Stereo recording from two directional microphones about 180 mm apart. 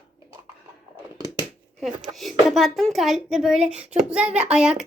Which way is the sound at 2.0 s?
Centre (ahead or behind).